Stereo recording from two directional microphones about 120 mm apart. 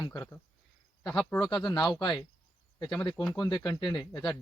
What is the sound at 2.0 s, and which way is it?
Speech, 40° left (ahead or behind).